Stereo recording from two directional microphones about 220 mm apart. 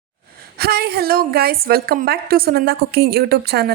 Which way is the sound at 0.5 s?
45° right (ahead or behind).